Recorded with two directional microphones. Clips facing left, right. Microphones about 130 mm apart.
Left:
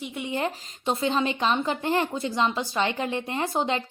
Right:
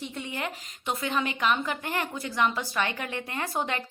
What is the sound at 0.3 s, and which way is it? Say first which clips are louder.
A woman's voice: left 6 dB; 30° left (ahead or behind).